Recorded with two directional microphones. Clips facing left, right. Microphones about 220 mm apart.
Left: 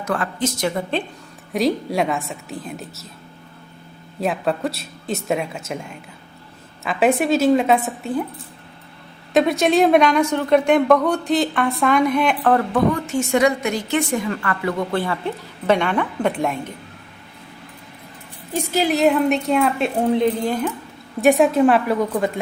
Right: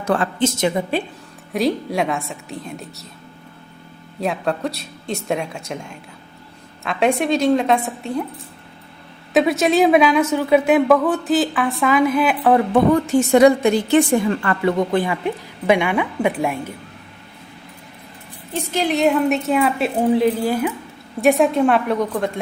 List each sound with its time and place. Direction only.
0.0 s a woman's voice: 30° right (ahead or behind)
1.5 s a woman's voice: centre (ahead or behind)
4.2 s a woman's voice: centre (ahead or behind)
9.3 s a woman's voice: centre (ahead or behind)
12.7 s a woman's voice: 35° right (ahead or behind); by 16.7 s 10° right (ahead or behind)
18.5 s a woman's voice: 5° left (ahead or behind)